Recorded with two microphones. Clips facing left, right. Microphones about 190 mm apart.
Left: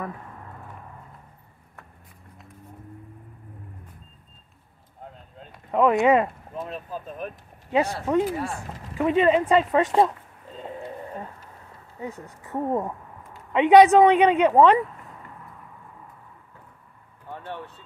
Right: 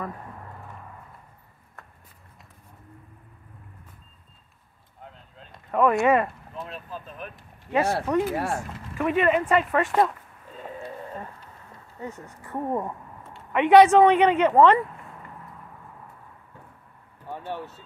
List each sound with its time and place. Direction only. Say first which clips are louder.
5.7 s speech: left 2 dB; 15° left (ahead or behind)
6.5 s speech: left 4 dB; 45° left (ahead or behind)
7.7 s speech: left 1 dB; 15° left (ahead or behind)
10.6 s a sound: left 1 dB; 20° left (ahead or behind)
12.0 s speech: left 2 dB; 15° left (ahead or behind)
17.3 s speech: right 2 dB; 5° right (ahead or behind)